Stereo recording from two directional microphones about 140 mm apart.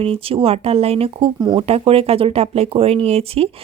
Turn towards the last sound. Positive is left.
turn(degrees=-45)  # may be behind; listen again after turning